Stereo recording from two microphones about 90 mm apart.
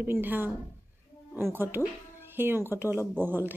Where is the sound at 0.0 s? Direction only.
20° right (ahead or behind).